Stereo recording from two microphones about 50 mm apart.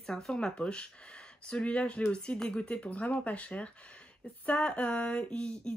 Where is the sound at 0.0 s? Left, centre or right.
Centre.